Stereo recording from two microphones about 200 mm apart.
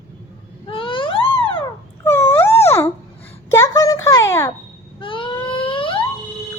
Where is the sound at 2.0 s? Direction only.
10° left (ahead or behind).